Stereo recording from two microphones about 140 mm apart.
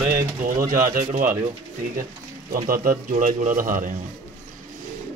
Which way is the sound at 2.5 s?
90° right.